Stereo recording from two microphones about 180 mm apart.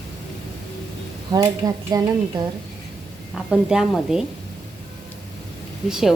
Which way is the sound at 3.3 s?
5° right (ahead or behind).